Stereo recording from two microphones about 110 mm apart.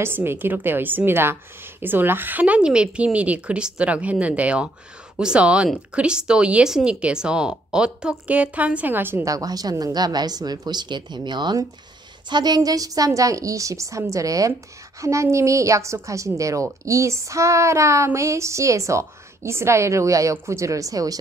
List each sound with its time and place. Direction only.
0.0 s a woman's voice: 20° right (ahead or behind)
9.3 s speech: 35° right (ahead or behind)
15.0 s a sound: 25° right (ahead or behind)